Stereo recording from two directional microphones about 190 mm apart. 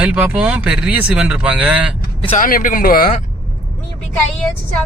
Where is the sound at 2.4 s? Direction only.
45° left (ahead or behind).